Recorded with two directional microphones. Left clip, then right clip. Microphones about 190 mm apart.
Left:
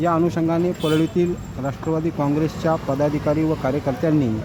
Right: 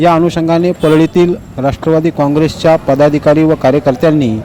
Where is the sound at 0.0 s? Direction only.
30° right (ahead or behind).